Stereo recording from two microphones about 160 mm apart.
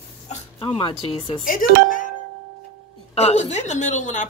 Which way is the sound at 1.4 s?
60° left (ahead or behind).